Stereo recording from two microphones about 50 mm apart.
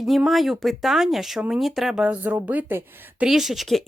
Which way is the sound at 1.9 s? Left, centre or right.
Right.